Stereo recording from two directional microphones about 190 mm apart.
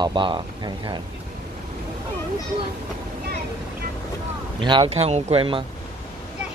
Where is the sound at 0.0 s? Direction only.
25° right (ahead or behind).